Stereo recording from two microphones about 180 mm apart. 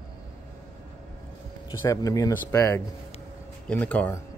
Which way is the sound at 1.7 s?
20° left (ahead or behind).